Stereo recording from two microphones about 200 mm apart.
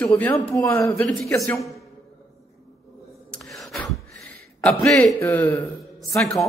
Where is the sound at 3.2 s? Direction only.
5° left (ahead or behind).